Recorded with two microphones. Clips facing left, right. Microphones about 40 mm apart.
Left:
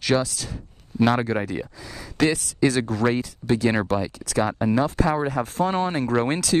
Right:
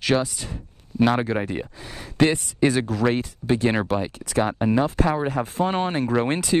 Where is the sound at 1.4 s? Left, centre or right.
Right.